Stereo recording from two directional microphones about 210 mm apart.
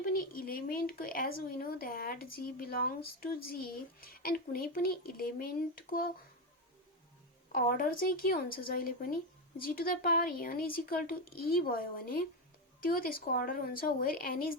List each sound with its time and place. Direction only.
0.0 s speech: 45° left (ahead or behind)
7.5 s speech: 45° left (ahead or behind)